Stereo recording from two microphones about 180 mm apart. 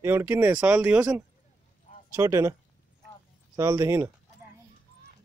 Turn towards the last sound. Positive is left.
turn(degrees=-15)  # may be behind; listen again after turning